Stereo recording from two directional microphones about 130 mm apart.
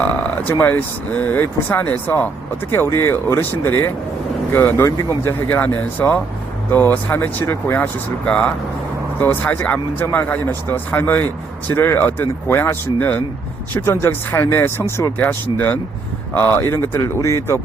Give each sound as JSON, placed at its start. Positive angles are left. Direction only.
{"t": 0.0, "sound": "speech", "side_deg": 10}